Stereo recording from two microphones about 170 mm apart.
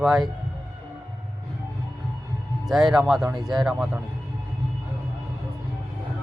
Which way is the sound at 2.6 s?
Centre (ahead or behind).